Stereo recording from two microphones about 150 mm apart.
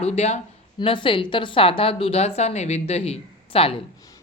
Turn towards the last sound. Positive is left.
turn(degrees=40)  # may be behind; listen again after turning